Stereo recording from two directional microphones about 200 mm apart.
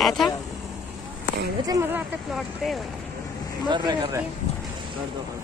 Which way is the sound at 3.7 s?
20° right (ahead or behind).